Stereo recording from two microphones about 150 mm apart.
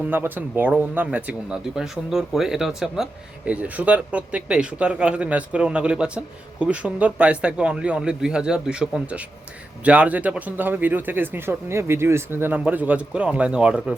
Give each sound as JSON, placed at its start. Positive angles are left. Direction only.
{"t": 0.0, "sound": "speech", "side_deg": -15}